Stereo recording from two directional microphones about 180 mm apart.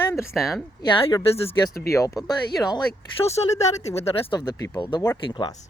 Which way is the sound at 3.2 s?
35° left (ahead or behind).